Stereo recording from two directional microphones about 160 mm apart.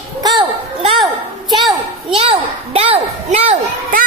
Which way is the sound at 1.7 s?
35° right (ahead or behind).